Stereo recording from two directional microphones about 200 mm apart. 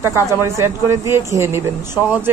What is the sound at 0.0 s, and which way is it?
A man's voice, 15° right (ahead or behind).